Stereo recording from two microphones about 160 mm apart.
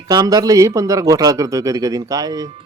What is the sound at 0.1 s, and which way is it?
A man's voice, 25° right (ahead or behind).